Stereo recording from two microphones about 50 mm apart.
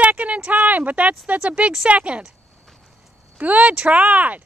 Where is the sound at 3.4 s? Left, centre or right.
Right.